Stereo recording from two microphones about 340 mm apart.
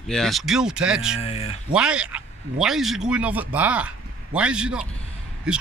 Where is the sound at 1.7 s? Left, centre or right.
Centre.